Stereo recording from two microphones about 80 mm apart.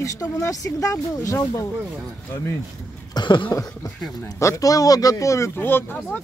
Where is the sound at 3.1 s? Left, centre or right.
Left.